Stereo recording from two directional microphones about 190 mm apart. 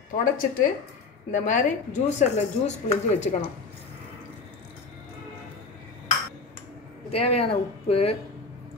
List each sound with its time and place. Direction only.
0.1 s speech: 45° left (ahead or behind)
7.1 s speech: 30° left (ahead or behind)